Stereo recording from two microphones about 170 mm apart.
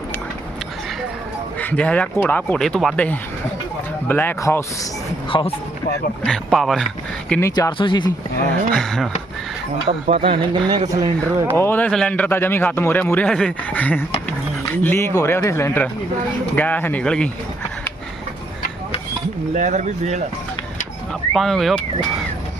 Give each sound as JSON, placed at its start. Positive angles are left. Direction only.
{"t": 1.5, "sound": "a man's voice", "side_deg": 10}
{"t": 5.3, "sound": "speech", "side_deg": 30}
{"t": 6.2, "sound": "speech", "side_deg": 0}
{"t": 7.3, "sound": "a man's voice", "side_deg": 10}
{"t": 7.5, "sound": "speech", "side_deg": 25}
{"t": 8.7, "sound": "speech", "side_deg": 0}
{"t": 10.1, "sound": "speech", "side_deg": -30}
{"t": 11.5, "sound": "a man's voice", "side_deg": 15}
{"t": 19.5, "sound": "speech", "side_deg": -45}
{"t": 21.1, "sound": "speech", "side_deg": 0}